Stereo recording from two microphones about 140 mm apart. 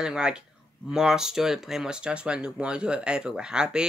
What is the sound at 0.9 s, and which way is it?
Speech, 5° right (ahead or behind).